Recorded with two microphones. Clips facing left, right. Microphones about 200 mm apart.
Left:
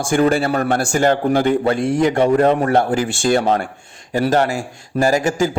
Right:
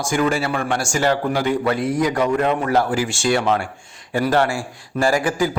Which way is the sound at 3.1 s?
50° left (ahead or behind).